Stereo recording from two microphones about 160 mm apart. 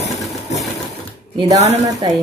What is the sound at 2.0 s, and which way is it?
Speech, 30° right (ahead or behind).